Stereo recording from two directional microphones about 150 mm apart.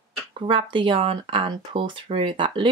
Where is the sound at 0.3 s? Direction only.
35° right (ahead or behind).